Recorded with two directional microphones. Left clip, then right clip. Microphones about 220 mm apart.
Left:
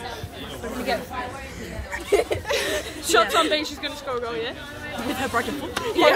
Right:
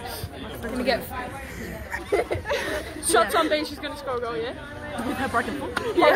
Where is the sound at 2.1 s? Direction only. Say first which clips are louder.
Left 3 dB; 45° left (ahead or behind).